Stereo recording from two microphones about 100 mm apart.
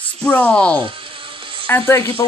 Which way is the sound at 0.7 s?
60° right (ahead or behind).